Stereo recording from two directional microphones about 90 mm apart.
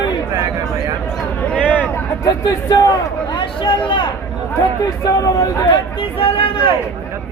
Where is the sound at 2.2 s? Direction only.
40° left (ahead or behind).